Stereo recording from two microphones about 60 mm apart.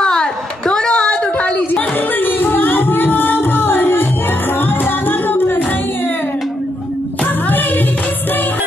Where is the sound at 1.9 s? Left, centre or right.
Left.